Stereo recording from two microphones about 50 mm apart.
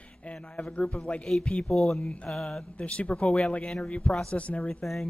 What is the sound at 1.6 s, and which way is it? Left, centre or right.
Speech, centre.